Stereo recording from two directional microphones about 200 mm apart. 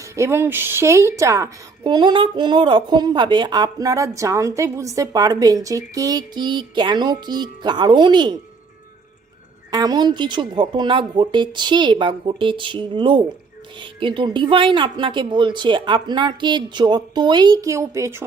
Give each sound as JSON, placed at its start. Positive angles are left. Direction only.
{"t": 0.0, "sound": "a woman's voice", "side_deg": -15}
{"t": 9.7, "sound": "a woman's voice", "side_deg": -20}